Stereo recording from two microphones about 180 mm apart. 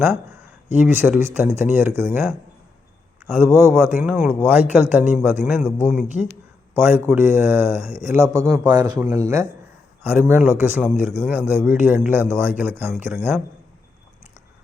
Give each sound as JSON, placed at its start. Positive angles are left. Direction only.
{"t": 0.7, "sound": "a man's voice", "side_deg": -10}
{"t": 3.3, "sound": "a man's voice", "side_deg": -15}
{"t": 6.7, "sound": "a man's voice", "side_deg": -15}